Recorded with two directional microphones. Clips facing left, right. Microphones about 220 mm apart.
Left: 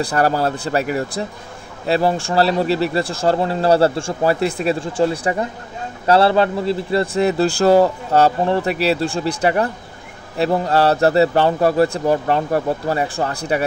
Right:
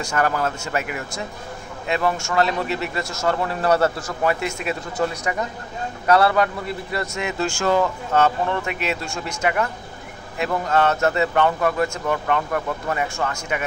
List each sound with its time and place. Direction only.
0.0 s speech: 35° left (ahead or behind)